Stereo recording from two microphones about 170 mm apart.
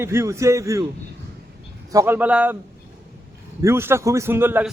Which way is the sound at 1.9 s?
20° right (ahead or behind).